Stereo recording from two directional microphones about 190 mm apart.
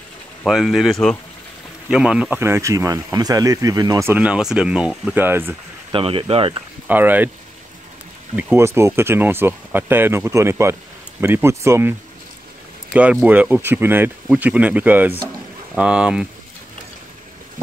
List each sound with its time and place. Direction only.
0.4 s speech: centre (ahead or behind)
5.9 s speech: 25° right (ahead or behind)
6.9 s speech: 10° right (ahead or behind)
8.4 s speech: 10° right (ahead or behind)
12.9 s speech: 5° right (ahead or behind)